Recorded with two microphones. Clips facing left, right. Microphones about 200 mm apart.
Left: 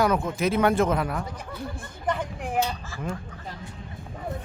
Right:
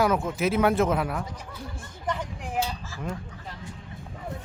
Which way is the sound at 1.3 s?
60° left (ahead or behind).